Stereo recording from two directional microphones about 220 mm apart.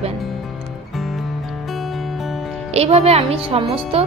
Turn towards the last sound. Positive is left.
turn(degrees=-25)  # may be behind; listen again after turning